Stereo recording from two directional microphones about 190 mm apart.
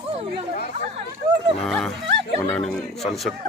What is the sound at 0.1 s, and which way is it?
Chatter, 35° right (ahead or behind).